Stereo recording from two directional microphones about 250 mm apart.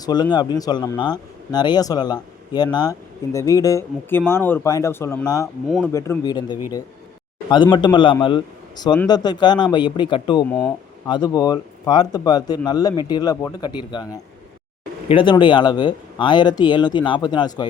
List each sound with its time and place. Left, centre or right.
0.0 s speech: centre
5.6 s speech: centre
5.9 s speech: centre
10.5 s speech: centre